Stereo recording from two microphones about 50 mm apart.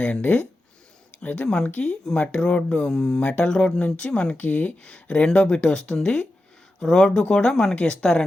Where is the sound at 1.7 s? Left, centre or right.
Left.